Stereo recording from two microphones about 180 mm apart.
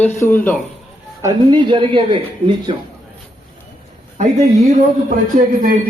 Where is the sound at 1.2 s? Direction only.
20° right (ahead or behind).